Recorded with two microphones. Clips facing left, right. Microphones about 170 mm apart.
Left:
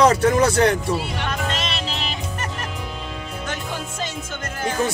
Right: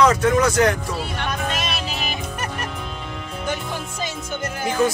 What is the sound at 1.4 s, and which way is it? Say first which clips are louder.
Music: even; 10° right (ahead or behind).